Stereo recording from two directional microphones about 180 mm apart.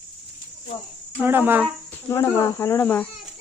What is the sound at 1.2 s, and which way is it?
Speech, 10° right (ahead or behind).